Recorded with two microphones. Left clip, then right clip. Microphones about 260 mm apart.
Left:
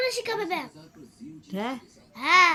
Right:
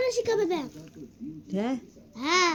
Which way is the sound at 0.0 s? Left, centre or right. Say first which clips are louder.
Right 2 dB; centre.